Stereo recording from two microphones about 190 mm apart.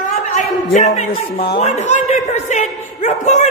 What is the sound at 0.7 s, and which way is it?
A man's voice, 35° left (ahead or behind).